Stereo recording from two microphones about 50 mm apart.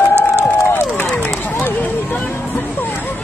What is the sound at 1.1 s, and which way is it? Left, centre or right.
Run, left.